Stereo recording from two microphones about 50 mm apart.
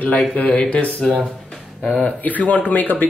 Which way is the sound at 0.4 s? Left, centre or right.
Left.